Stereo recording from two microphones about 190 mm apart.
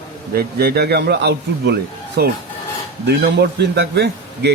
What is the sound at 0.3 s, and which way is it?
A man's voice, 55° right (ahead or behind).